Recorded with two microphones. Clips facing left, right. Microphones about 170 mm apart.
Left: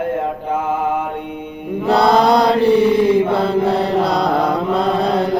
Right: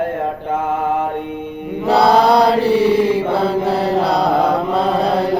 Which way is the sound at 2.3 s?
35° right (ahead or behind).